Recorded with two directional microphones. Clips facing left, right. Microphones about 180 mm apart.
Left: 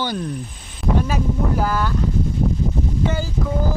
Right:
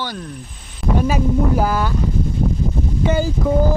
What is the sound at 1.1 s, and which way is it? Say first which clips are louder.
Speech: right 4 dB; 10° right (ahead or behind).